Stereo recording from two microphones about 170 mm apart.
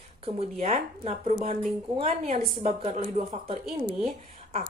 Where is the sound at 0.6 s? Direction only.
40° right (ahead or behind).